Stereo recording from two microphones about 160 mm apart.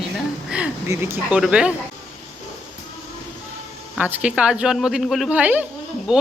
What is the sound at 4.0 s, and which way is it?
Speech, 10° right (ahead or behind).